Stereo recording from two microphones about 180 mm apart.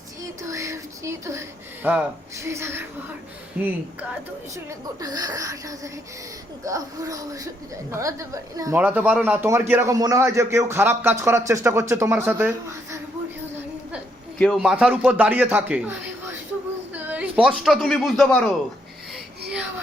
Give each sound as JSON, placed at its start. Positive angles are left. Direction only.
{"t": 0.4, "sound": "a sound", "side_deg": -15}
{"t": 1.8, "sound": "speech", "side_deg": -15}
{"t": 4.5, "sound": "a woman's voice", "side_deg": -20}
{"t": 14.3, "sound": "speech", "side_deg": 5}
{"t": 16.9, "sound": "speech", "side_deg": -10}